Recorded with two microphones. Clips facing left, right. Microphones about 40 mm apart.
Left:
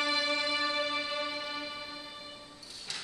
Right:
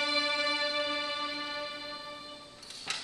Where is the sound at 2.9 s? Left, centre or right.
Right.